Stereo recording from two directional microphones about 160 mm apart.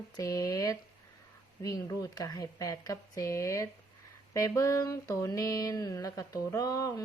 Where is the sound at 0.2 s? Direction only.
20° left (ahead or behind).